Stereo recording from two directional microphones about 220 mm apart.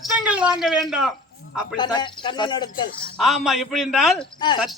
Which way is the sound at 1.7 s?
20° left (ahead or behind).